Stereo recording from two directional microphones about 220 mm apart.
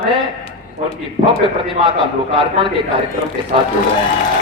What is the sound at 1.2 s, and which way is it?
Speech, 35° right (ahead or behind).